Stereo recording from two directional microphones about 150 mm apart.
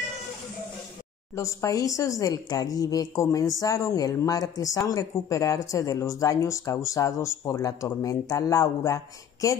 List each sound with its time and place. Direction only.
1.3 s speech: 20° left (ahead or behind)